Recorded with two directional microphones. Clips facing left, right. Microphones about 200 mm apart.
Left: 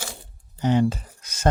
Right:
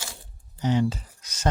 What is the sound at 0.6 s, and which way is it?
Speech, 55° left (ahead or behind).